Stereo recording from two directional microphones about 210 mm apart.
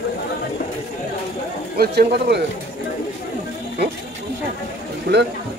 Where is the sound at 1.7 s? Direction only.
50° right (ahead or behind).